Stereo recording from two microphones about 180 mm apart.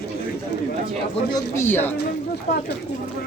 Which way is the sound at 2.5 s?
40° left (ahead or behind).